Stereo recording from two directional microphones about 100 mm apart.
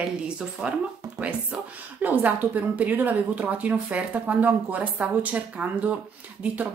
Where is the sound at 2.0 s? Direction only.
15° right (ahead or behind).